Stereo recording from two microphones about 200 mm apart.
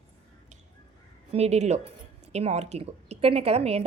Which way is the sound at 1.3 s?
35° right (ahead or behind).